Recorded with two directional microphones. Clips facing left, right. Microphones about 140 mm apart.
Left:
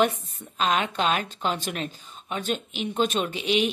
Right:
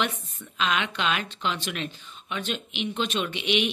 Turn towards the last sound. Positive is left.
turn(degrees=35)  # may be behind; listen again after turning